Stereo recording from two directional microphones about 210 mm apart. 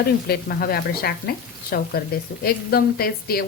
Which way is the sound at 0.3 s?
45° left (ahead or behind).